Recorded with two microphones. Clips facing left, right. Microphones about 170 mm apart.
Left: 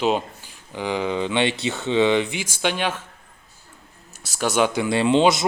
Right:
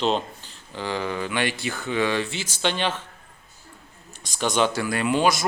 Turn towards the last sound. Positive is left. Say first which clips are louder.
# left 4 dB
turn(degrees=20)  # may be behind; listen again after turning